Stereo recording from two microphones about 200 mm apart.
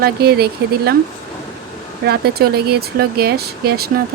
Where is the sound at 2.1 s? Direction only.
50° right (ahead or behind).